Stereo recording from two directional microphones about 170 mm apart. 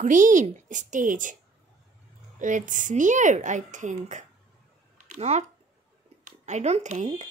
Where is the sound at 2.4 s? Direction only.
50° right (ahead or behind).